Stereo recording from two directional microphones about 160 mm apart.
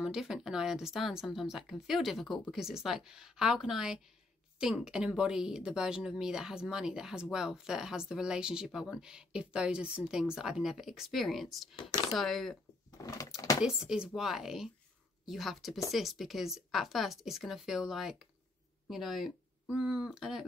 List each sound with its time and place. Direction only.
0.0 s speech: 5° right (ahead or behind)
12.9 s a sound: 20° left (ahead or behind)
13.7 s speech: 5° right (ahead or behind)